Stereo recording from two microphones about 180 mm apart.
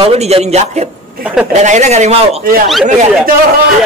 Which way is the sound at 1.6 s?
40° right (ahead or behind).